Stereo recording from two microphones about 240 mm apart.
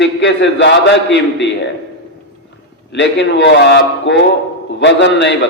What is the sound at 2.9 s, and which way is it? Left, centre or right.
A man's voice, left.